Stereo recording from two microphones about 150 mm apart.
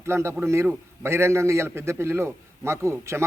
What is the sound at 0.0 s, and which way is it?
A man's voice, 15° right (ahead or behind).